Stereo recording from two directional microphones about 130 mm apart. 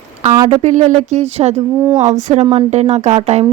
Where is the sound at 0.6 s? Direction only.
70° right (ahead or behind).